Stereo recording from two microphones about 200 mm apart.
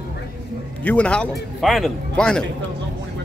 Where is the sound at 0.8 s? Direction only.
5° left (ahead or behind).